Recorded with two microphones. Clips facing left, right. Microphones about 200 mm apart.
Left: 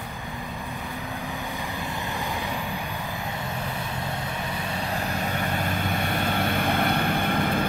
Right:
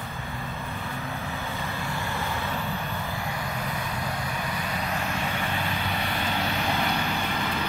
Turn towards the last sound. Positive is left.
turn(degrees=50)  # may be behind; listen again after turning